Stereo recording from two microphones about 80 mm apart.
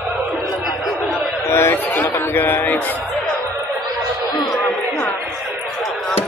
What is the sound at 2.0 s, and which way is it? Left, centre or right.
Speech, left.